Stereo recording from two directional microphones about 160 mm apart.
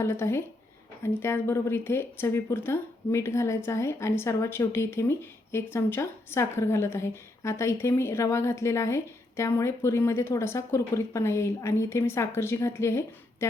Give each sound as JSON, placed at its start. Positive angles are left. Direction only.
{"t": 0.0, "sound": "speech", "side_deg": 15}